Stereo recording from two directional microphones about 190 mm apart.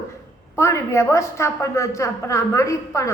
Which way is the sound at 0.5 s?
15° left (ahead or behind).